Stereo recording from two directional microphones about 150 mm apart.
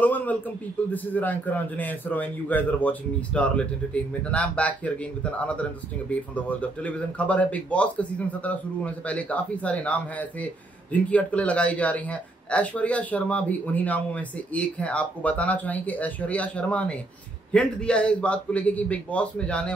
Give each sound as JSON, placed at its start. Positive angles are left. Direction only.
{"t": 0.0, "sound": "a man's voice", "side_deg": 10}